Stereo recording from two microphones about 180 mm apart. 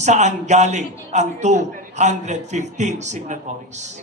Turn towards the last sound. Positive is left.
turn(degrees=-40)  # may be behind; listen again after turning